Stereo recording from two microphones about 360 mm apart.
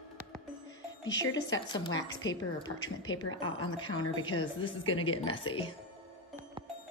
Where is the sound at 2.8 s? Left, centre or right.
Left.